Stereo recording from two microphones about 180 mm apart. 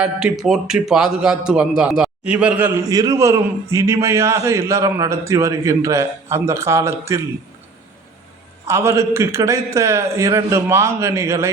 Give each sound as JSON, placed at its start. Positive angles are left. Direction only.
{"t": 0.0, "sound": "a man's voice", "side_deg": -5}
{"t": 8.6, "sound": "a man's voice", "side_deg": -15}